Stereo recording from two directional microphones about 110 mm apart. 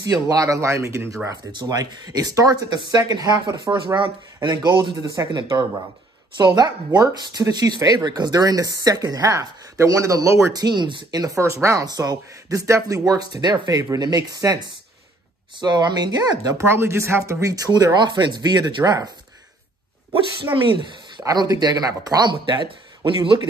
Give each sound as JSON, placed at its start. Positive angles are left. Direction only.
{"t": 0.0, "sound": "speech", "side_deg": -35}
{"t": 1.5, "sound": "speech", "side_deg": -40}
{"t": 15.6, "sound": "speech", "side_deg": -40}
{"t": 16.6, "sound": "speech", "side_deg": -25}
{"t": 21.2, "sound": "speech", "side_deg": -35}
{"t": 22.3, "sound": "speech", "side_deg": -45}